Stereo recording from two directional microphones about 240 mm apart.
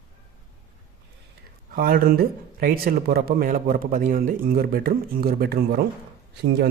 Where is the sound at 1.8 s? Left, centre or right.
Right.